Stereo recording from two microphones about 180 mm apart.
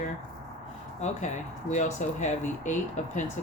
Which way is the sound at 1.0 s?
40° left (ahead or behind).